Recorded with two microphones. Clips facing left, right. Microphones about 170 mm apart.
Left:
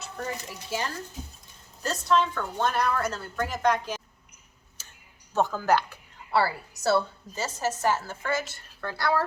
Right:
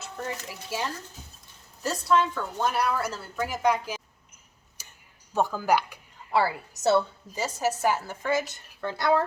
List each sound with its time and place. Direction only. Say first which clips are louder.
0.2 s a woman's voice: even; 5° right (ahead or behind)
4.8 s tick-tock: right 1 dB; 15° right (ahead or behind)
5.3 s a woman's voice: even; 10° right (ahead or behind)